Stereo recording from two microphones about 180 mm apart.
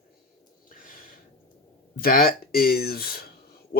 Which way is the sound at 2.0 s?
55° left (ahead or behind).